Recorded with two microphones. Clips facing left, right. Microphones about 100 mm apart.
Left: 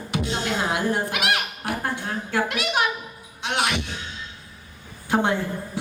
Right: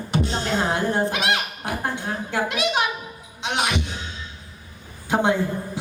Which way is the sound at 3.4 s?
20° right (ahead or behind).